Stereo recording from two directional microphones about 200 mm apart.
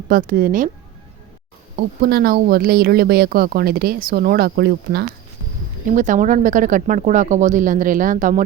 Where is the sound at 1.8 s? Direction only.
50° right (ahead or behind).